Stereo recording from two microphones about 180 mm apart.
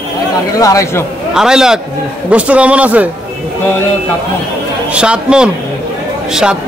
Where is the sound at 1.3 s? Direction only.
5° right (ahead or behind).